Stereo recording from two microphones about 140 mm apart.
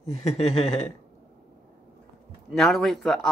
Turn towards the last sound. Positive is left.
turn(degrees=5)  # may be behind; listen again after turning